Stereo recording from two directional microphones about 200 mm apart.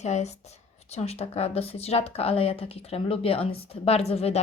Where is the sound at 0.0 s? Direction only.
35° left (ahead or behind).